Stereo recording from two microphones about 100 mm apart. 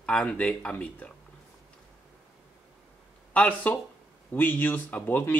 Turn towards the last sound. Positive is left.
turn(degrees=15)  # may be behind; listen again after turning